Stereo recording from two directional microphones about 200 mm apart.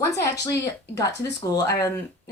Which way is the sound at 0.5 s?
15° left (ahead or behind).